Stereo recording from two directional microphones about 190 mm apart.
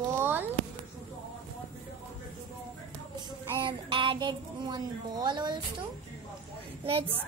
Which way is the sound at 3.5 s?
25° right (ahead or behind).